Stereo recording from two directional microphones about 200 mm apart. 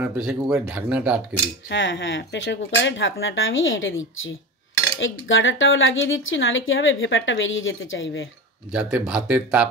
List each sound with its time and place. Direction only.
0.0 s speech: 5° right (ahead or behind)
1.7 s speech: 65° left (ahead or behind)
5.3 s a woman's voice: 75° left (ahead or behind)
8.7 s speech: 5° right (ahead or behind)